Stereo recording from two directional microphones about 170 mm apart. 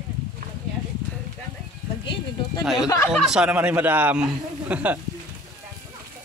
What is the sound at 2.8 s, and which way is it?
Speech, 20° left (ahead or behind).